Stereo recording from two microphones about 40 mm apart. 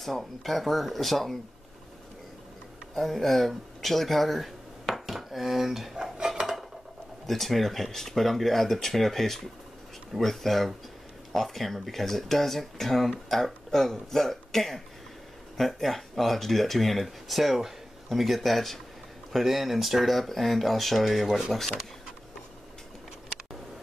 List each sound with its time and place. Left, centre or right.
0.0 s speech: centre
3.0 s speech: centre
4.8 s dishes: centre
6.1 s dishes: centre
7.2 s speech: centre